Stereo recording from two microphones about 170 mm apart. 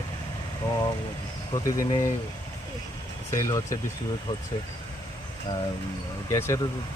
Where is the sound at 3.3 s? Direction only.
20° left (ahead or behind).